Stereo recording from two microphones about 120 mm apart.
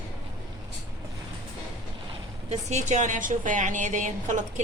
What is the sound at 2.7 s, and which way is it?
A woman's voice, 80° right.